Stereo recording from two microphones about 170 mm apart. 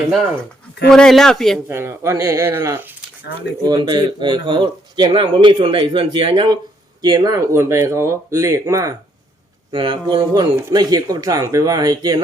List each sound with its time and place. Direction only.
0.9 s speech: centre (ahead or behind)
1.6 s speech: 15° right (ahead or behind)
3.6 s speech: 25° right (ahead or behind)